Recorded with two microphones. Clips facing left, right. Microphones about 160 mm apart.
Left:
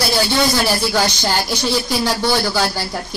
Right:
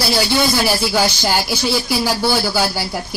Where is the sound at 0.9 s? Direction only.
10° right (ahead or behind).